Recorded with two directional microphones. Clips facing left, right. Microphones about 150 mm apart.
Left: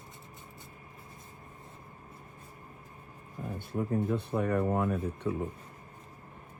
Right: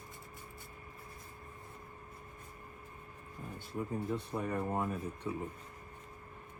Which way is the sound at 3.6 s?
60° left (ahead or behind).